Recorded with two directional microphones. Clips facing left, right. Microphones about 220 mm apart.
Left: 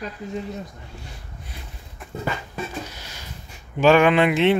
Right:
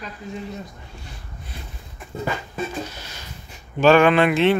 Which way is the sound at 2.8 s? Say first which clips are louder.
Right 1 dB; 15° left (ahead or behind).